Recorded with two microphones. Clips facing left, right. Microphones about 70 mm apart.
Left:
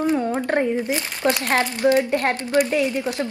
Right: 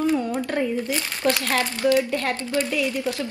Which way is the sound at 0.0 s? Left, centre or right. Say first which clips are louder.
Left 2 dB; left.